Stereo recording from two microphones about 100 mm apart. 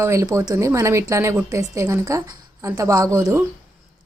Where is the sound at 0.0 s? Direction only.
30° right (ahead or behind).